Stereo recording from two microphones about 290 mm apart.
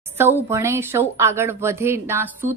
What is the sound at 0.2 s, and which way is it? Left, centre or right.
Speech, centre.